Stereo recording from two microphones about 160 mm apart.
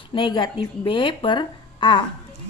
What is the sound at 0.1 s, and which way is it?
A woman's voice, 30° left (ahead or behind).